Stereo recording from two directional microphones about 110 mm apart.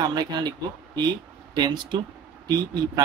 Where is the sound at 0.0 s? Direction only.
40° right (ahead or behind).